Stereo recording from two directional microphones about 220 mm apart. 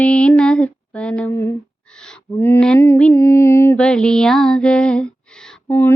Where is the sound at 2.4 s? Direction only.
5° left (ahead or behind).